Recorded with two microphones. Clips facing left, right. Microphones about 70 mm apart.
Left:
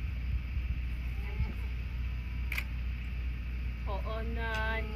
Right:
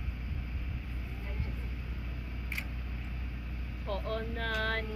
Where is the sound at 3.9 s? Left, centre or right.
Right.